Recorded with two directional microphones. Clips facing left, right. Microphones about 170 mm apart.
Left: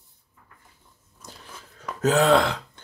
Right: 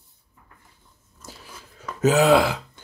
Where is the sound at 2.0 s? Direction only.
10° right (ahead or behind).